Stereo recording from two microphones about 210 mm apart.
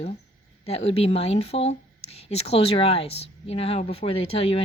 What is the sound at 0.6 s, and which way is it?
A woman's voice, 30° left (ahead or behind).